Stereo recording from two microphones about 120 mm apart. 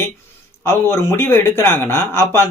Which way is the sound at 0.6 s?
20° left (ahead or behind).